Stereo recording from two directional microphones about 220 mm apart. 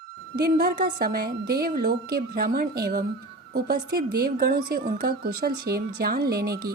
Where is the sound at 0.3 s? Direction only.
45° right (ahead or behind).